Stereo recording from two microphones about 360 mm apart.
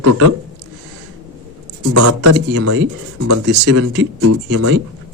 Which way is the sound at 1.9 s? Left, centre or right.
Right.